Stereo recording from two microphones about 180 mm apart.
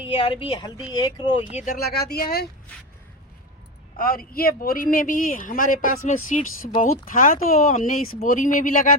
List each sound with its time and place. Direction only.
0.0 s a woman's voice: 30° left (ahead or behind)
1.5 s speech: 50° left (ahead or behind)
3.9 s a man's voice: 55° left (ahead or behind)